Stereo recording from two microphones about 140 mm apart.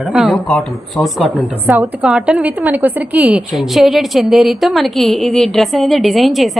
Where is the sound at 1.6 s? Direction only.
15° right (ahead or behind).